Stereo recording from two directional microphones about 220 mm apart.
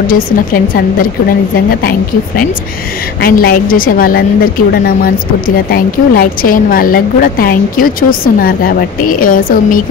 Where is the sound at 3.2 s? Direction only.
40° left (ahead or behind).